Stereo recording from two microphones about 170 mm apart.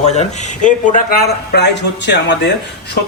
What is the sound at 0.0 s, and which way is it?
Speech, 40° left (ahead or behind).